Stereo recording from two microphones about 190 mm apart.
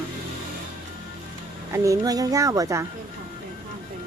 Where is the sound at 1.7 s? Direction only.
15° right (ahead or behind).